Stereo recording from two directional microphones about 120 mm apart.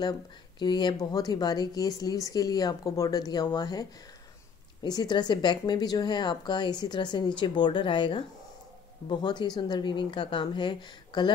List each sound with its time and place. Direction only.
0.6 s speech: 40° left (ahead or behind)
4.8 s speech: 35° left (ahead or behind)